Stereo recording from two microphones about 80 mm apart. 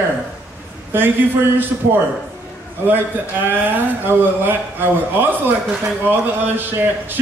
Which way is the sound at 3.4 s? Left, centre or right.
Right.